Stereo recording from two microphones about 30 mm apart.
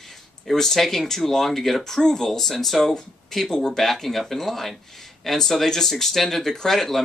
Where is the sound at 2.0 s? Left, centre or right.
Centre.